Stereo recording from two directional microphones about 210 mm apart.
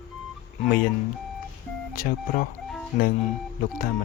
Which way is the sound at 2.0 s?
40° left (ahead or behind).